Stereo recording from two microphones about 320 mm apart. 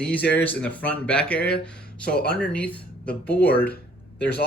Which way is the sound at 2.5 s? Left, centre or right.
Centre.